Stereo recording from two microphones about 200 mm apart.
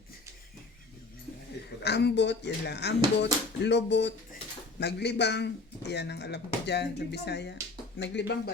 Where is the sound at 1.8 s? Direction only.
55° left (ahead or behind).